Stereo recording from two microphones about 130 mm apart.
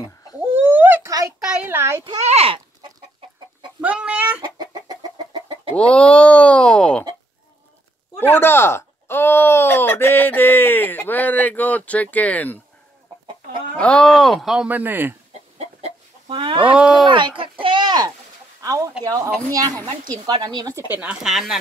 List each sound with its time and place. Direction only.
0.4 s a sound: 15° right (ahead or behind)
1.5 s a child's voice: 15° right (ahead or behind)
2.2 s speech: 50° right (ahead or behind)
3.8 s a child's voice: 10° right (ahead or behind)
4.4 s chicken: 30° right (ahead or behind)
5.8 s speech: 10° left (ahead or behind)
8.2 s speech: 15° left (ahead or behind)
13.7 s speech: 10° left (ahead or behind); by 15.1 s 15° right (ahead or behind)
16.3 s speech: 40° right (ahead or behind)
16.6 s a child's voice: 10° right (ahead or behind)
17.1 s speech: 40° right (ahead or behind)
20.9 s speech: 10° right (ahead or behind)